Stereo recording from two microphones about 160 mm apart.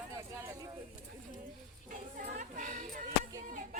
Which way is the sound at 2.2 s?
55° right (ahead or behind).